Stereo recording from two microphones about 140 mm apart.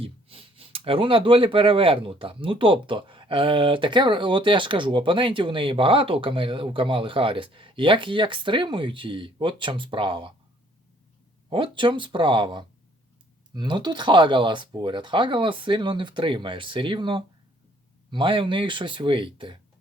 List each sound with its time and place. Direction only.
0.0 s speech: 40° right (ahead or behind)
11.4 s speech: 35° right (ahead or behind)